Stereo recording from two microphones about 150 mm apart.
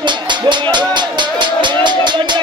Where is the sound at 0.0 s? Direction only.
30° right (ahead or behind).